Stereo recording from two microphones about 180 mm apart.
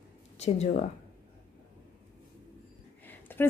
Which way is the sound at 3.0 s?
10° left (ahead or behind).